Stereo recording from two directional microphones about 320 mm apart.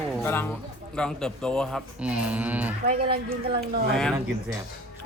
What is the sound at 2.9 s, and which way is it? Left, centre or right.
Speech, right.